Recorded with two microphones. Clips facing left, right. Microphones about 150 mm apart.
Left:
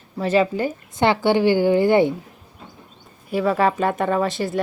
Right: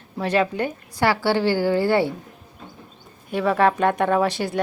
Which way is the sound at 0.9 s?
20° left (ahead or behind).